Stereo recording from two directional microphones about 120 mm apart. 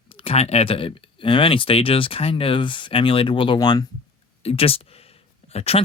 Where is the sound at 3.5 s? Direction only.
35° left (ahead or behind).